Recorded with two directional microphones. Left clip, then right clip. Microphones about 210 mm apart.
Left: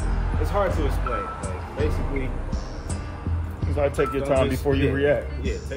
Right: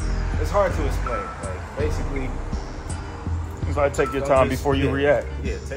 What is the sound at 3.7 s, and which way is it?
Speech, 15° right (ahead or behind).